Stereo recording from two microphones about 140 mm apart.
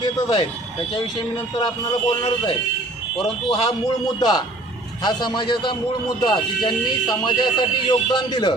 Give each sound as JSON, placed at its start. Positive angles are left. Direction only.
{"t": 0.0, "sound": "speech", "side_deg": 35}